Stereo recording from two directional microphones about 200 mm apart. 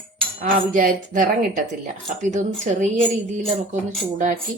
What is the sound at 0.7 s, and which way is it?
A woman's voice, 40° right (ahead or behind).